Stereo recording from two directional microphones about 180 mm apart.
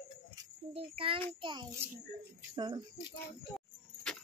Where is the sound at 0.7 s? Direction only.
30° right (ahead or behind).